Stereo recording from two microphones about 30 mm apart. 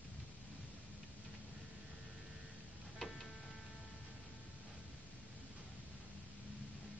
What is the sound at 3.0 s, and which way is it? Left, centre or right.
Music, centre.